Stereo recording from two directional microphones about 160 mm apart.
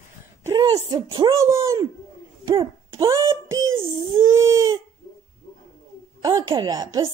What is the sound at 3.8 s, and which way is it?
Speech, 25° right (ahead or behind).